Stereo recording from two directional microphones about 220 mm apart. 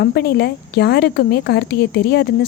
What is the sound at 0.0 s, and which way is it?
A woman's voice, 45° left (ahead or behind).